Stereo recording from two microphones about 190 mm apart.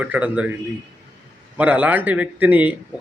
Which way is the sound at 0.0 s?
10° right (ahead or behind).